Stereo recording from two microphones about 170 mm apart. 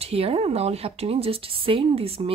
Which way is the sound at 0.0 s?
35° right (ahead or behind).